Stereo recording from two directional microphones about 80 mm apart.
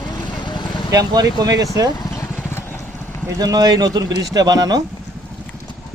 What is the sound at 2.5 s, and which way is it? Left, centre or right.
Vehicle, left.